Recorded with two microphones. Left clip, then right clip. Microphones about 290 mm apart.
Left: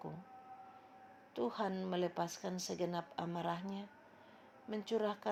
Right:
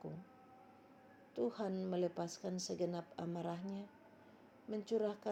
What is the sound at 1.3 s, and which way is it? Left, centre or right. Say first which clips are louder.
Speech: left 2 dB; left.